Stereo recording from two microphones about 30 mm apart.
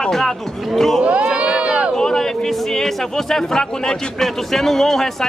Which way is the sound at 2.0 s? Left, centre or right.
Centre.